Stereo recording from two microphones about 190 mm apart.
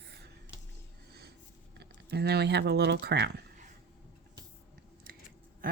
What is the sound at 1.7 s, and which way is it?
Speech, 60° right (ahead or behind).